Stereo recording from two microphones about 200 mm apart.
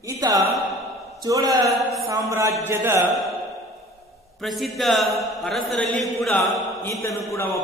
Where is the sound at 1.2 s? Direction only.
15° right (ahead or behind).